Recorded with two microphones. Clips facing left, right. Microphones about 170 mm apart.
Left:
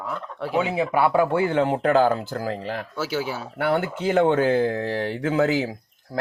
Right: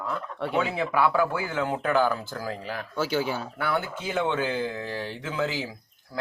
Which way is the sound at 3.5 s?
65° left (ahead or behind).